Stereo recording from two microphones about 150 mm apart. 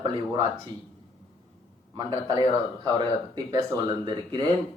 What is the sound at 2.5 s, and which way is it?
Speech, 25° right (ahead or behind).